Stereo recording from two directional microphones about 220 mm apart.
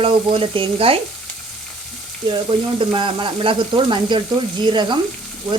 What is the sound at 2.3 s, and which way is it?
Speech, 25° right (ahead or behind).